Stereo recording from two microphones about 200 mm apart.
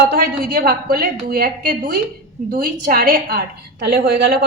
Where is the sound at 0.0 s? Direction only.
55° right (ahead or behind).